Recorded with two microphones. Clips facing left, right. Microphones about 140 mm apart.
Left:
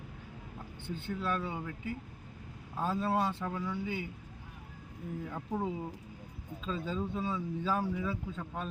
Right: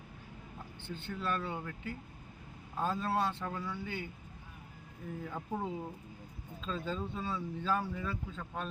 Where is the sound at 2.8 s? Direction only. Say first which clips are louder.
Left 2 dB; 10° left (ahead or behind).